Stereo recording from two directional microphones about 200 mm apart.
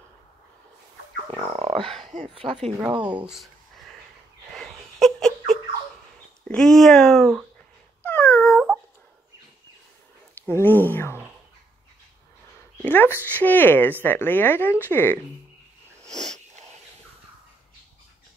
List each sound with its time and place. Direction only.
1.4 s a sound: 30° right (ahead or behind)
2.2 s a woman's voice: 25° right (ahead or behind)
3.2 s speech: 5° right (ahead or behind)
4.6 s a sound: centre (ahead or behind)
6.5 s speech: centre (ahead or behind)
8.0 s cat: 10° left (ahead or behind)
10.4 s speech: 10° left (ahead or behind)
12.8 s speech: 10° left (ahead or behind)